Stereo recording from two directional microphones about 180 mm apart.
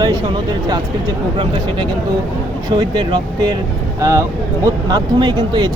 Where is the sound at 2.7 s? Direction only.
25° right (ahead or behind).